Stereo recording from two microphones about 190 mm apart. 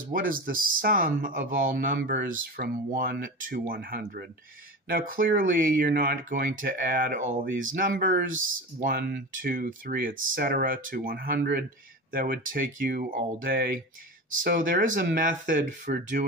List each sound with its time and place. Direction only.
0.1 s speech: 45° right (ahead or behind)